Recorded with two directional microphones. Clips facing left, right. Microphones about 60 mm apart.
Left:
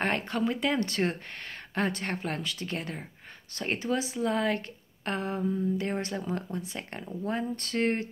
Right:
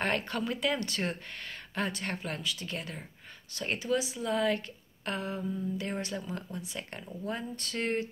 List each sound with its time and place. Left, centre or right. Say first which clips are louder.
0.0 s speech: left 3 dB; left